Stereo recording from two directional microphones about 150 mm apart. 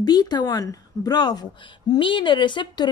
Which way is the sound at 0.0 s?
25° left (ahead or behind).